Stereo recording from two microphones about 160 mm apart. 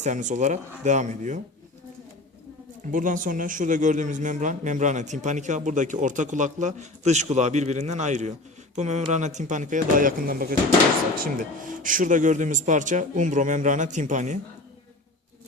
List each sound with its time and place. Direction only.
0.0 s a man's voice: 50° right (ahead or behind)
2.9 s a man's voice: 55° right (ahead or behind)